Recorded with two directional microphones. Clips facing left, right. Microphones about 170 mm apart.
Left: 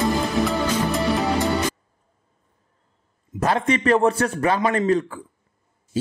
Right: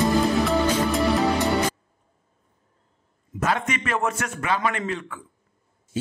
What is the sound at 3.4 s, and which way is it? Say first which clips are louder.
A man's voice: left 6 dB; 35° left (ahead or behind).